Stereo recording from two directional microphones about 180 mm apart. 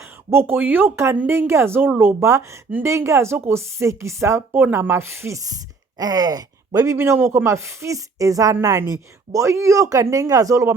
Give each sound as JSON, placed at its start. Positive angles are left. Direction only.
{"t": 0.0, "sound": "a woman's voice", "side_deg": -15}